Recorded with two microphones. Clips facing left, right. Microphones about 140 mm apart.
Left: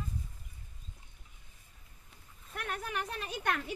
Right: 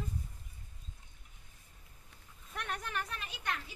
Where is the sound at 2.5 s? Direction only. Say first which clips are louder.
Left 2 dB; 5° left (ahead or behind).